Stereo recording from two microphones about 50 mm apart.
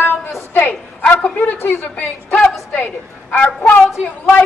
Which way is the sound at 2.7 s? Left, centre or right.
Left.